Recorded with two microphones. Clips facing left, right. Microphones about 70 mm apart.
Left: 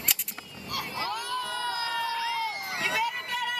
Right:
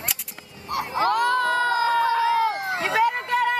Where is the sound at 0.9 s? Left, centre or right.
Right.